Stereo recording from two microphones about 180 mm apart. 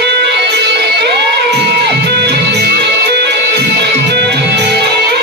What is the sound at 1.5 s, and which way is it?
Music, 65° right (ahead or behind).